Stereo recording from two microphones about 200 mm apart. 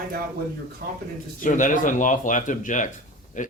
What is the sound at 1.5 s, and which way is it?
Speech, 40° left (ahead or behind).